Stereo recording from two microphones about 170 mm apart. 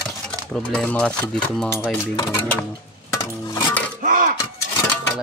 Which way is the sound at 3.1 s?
20° left (ahead or behind).